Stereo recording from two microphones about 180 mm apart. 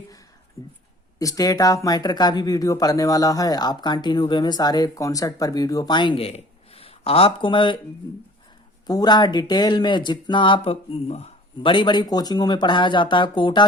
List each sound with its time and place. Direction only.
0.6 s speech: 20° left (ahead or behind)